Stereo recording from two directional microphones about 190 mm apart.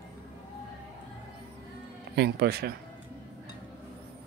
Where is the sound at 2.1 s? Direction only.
60° right (ahead or behind).